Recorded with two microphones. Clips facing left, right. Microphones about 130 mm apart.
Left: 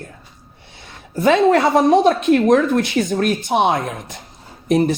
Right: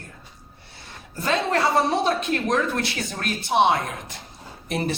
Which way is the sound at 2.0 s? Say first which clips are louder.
Left 9 dB; 50° left (ahead or behind).